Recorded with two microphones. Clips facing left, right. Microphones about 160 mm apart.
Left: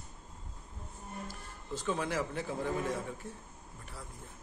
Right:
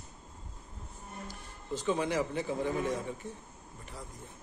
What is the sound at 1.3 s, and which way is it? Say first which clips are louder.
A man's voice: right 3 dB; centre (ahead or behind).